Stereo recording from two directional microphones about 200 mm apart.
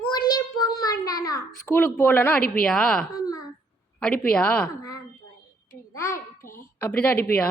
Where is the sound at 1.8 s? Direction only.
10° left (ahead or behind).